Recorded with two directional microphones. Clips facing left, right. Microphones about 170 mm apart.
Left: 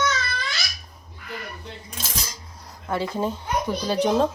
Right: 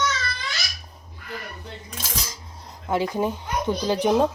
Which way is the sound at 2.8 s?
15° right (ahead or behind).